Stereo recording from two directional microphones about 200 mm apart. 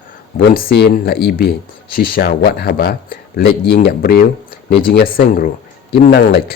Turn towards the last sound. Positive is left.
turn(degrees=55)  # may be behind; listen again after turning